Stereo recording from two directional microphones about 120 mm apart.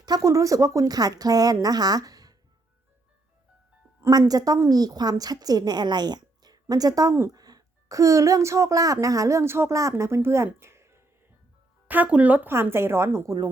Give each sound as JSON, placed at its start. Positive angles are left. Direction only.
{"t": 0.0, "sound": "speech", "side_deg": -30}
{"t": 4.3, "sound": "a woman's voice", "side_deg": -30}